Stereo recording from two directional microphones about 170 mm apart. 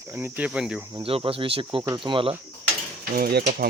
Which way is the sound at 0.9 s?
35° right (ahead or behind).